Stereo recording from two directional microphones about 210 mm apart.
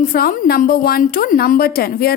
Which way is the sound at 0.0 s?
45° left (ahead or behind).